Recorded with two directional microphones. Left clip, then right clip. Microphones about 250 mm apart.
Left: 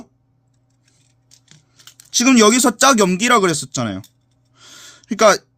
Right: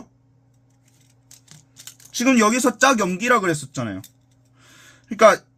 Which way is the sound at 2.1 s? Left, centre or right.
Left.